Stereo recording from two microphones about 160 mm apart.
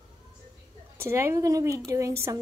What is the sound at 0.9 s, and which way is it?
Speech, 15° right (ahead or behind).